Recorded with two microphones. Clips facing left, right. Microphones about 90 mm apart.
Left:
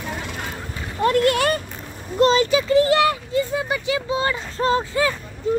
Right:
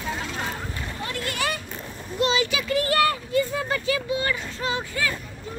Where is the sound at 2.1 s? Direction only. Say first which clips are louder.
Left 7 dB; 40° left (ahead or behind).